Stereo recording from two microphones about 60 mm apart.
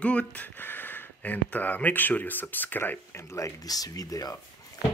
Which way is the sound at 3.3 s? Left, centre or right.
Left.